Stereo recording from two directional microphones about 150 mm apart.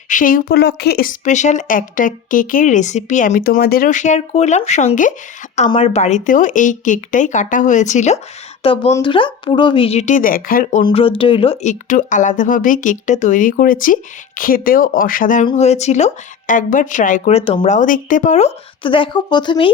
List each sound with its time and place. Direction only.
0.1 s speech: 65° left (ahead or behind); by 3.8 s 85° left
3.8 s speech: 55° left (ahead or behind)
5.7 s speech: 45° left (ahead or behind)
8.6 s speech: 40° left (ahead or behind); by 10.8 s 60° left (ahead or behind)
10.8 s speech: 35° left (ahead or behind); by 15.4 s 60° left (ahead or behind)
15.5 s speech: 50° left (ahead or behind)
17.3 s speech: 40° left (ahead or behind)
17.7 s speech: 60° left (ahead or behind); by 19.7 s 35° left (ahead or behind)